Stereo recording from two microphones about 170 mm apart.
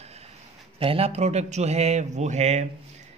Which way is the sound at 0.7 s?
35° right (ahead or behind).